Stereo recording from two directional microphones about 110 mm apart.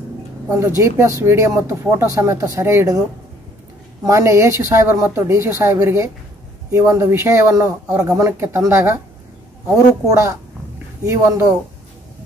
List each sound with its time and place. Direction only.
0.5 s speech: 25° right (ahead or behind)
4.0 s speech: 25° right (ahead or behind)
10.0 s speech: 30° right (ahead or behind)